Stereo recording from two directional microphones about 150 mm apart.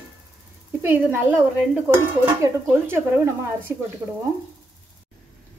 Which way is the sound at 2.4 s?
20° right (ahead or behind).